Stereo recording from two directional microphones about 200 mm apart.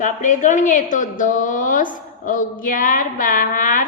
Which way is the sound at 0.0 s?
40° left (ahead or behind).